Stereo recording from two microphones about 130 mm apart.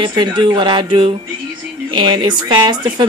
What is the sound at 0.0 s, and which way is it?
Speech, 35° right (ahead or behind).